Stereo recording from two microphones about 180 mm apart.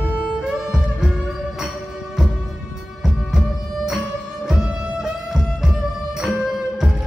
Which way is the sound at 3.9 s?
Centre (ahead or behind).